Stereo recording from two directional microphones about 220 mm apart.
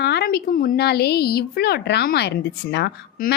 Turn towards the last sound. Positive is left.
turn(degrees=50)  # may be behind; listen again after turning